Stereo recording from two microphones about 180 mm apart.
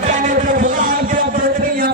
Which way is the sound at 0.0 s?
45° right (ahead or behind).